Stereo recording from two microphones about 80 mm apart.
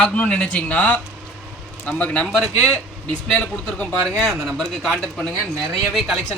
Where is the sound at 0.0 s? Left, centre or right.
Centre.